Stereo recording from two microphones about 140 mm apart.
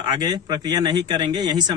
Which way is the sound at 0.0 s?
30° right (ahead or behind).